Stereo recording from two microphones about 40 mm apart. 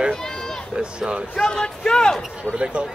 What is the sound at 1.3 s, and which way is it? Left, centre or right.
Speech, left.